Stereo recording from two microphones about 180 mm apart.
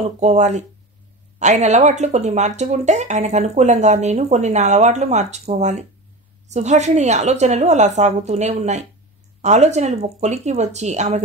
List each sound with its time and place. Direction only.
0.2 s speech: 40° right (ahead or behind)